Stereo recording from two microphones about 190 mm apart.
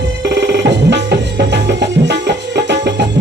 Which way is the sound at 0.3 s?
60° right (ahead or behind).